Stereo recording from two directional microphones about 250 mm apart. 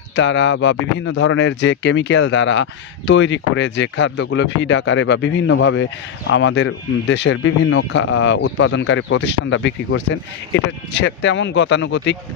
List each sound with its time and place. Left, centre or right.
0.1 s speech: left